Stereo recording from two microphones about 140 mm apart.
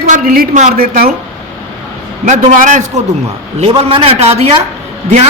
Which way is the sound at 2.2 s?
60° right (ahead or behind).